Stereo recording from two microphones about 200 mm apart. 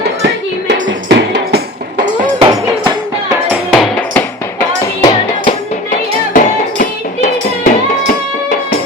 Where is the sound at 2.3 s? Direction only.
20° right (ahead or behind).